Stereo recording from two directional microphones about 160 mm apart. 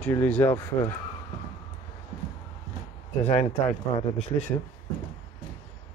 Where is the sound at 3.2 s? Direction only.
40° left (ahead or behind).